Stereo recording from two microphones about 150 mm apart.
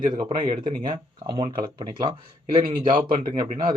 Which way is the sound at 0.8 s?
35° right (ahead or behind).